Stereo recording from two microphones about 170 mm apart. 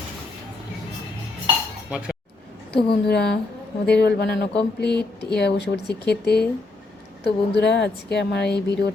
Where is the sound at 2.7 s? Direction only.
70° left (ahead or behind).